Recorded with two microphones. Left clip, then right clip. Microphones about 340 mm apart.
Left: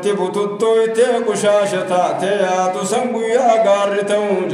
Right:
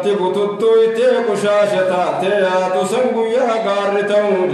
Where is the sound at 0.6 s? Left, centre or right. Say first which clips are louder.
Right 1 dB; left.